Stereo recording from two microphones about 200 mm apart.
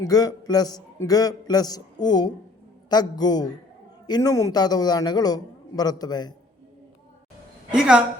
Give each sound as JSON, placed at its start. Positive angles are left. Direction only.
{"t": 0.1, "sound": "a man's voice", "side_deg": 20}
{"t": 7.8, "sound": "a woman's voice", "side_deg": -5}